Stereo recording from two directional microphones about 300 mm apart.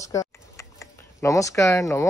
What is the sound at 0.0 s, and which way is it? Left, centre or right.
Speech, centre.